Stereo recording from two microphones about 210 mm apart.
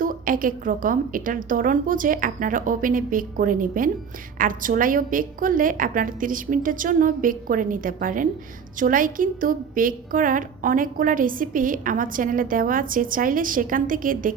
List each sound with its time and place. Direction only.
0.0 s a woman's voice: 40° right (ahead or behind)